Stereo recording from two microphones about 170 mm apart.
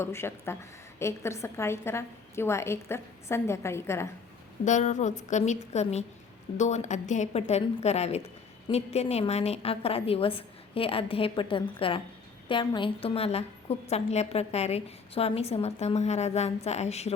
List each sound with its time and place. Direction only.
0.0 s a woman's voice: 15° left (ahead or behind)
4.6 s a woman's voice: 45° left (ahead or behind)